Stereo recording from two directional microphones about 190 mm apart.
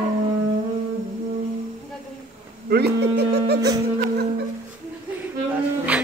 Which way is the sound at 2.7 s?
60° right (ahead or behind).